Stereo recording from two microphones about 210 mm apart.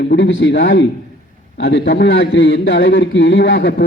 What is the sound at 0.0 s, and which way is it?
A man's voice, 55° left (ahead or behind).